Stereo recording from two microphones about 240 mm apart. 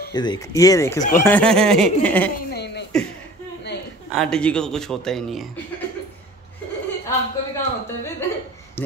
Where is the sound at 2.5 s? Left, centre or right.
Left.